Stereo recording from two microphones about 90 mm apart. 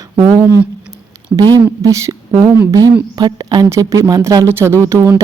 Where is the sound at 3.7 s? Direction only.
40° right (ahead or behind).